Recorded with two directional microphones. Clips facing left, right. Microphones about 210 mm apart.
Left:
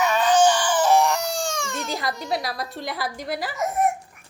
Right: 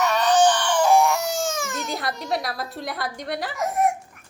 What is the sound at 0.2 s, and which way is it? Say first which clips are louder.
Crying: even; 10° left (ahead or behind).